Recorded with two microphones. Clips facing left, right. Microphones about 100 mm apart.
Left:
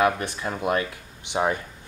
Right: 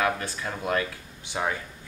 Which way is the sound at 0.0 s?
20° left (ahead or behind).